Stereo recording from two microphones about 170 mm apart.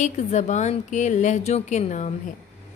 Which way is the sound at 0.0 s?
45° left (ahead or behind).